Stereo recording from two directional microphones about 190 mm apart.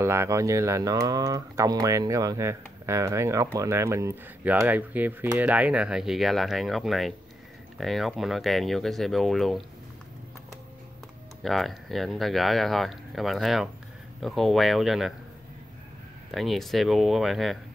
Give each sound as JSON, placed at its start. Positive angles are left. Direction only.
{"t": 0.0, "sound": "speech", "side_deg": -15}
{"t": 11.4, "sound": "speech", "side_deg": 0}
{"t": 16.3, "sound": "speech", "side_deg": 0}